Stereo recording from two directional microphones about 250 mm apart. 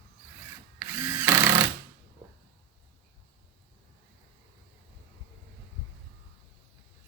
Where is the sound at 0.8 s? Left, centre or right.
Centre.